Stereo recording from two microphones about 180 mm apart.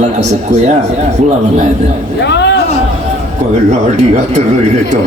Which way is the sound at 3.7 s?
40° right (ahead or behind).